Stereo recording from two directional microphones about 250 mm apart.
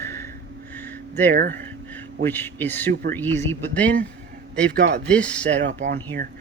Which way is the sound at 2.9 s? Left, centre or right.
Right.